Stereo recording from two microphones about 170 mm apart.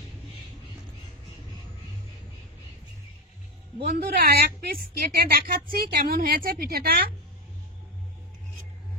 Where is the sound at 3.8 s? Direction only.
65° right (ahead or behind).